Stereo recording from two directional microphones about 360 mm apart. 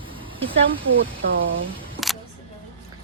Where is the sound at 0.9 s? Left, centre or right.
Right.